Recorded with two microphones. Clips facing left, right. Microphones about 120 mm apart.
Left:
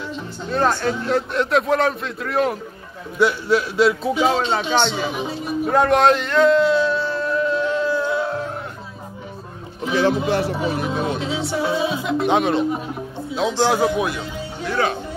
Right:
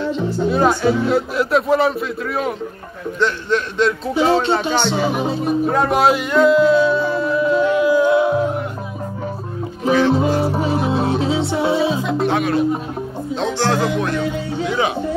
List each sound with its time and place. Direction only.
0.5 s speech: 10° right (ahead or behind)
3.2 s speech: 10° left (ahead or behind)
5.0 s speech: 50° right (ahead or behind)
5.7 s a sound: centre (ahead or behind)
10.6 s music: 35° right (ahead or behind)
12.3 s speech: 20° left (ahead or behind)
13.6 s speech: 10° left (ahead or behind)
14.7 s speech: 15° right (ahead or behind)